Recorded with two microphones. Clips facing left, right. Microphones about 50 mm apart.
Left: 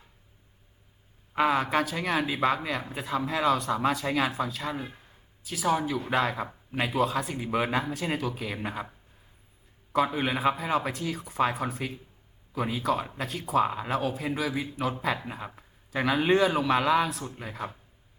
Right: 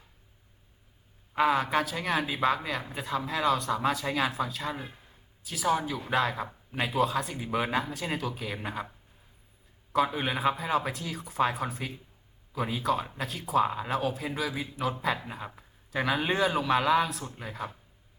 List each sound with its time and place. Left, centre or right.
1.4 s speech: centre
6.8 s speech: centre
9.9 s speech: centre